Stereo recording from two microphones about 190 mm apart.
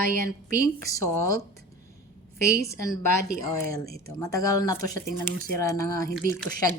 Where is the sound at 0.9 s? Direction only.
15° left (ahead or behind).